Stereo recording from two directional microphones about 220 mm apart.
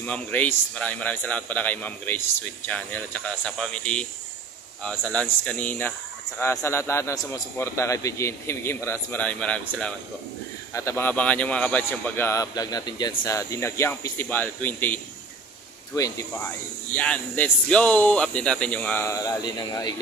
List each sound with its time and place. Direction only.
0.0 s speech: 5° left (ahead or behind)
15.9 s speech: 15° left (ahead or behind)